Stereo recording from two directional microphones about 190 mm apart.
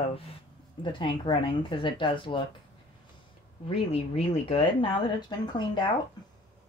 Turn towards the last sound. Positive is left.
turn(degrees=25)  # may be behind; listen again after turning